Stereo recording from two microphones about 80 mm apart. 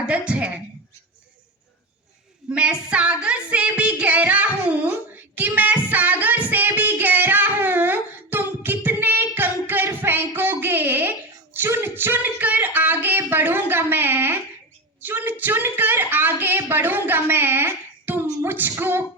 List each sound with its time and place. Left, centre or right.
0.0 s music: centre
2.5 s music: centre
5.9 s child singing: centre
11.5 s a woman's voice: right